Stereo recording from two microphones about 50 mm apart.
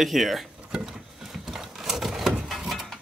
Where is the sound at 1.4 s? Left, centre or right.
Centre.